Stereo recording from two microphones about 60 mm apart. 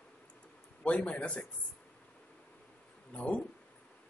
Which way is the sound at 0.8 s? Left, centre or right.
Centre.